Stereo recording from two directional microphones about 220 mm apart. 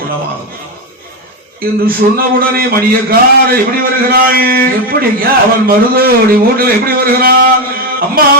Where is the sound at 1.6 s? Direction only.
40° right (ahead or behind).